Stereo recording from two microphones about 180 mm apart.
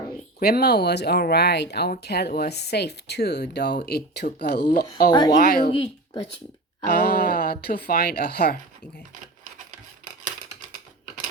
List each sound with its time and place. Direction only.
0.3 s speech: 60° left (ahead or behind)
5.7 s speech: 30° left (ahead or behind)
6.8 s speech: 60° left (ahead or behind)